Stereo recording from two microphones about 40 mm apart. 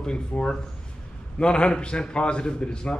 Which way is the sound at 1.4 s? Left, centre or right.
Left.